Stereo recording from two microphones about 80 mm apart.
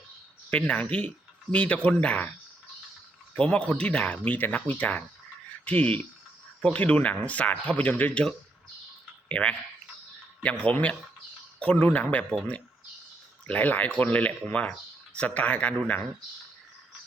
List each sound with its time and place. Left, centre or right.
0.5 s speech: centre
3.3 s speech: centre
9.3 s speech: centre
13.5 s speech: centre